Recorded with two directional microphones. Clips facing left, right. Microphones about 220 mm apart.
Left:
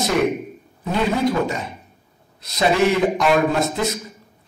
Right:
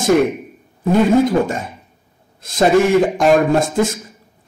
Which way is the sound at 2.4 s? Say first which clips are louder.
Right 5 dB; 50° right (ahead or behind).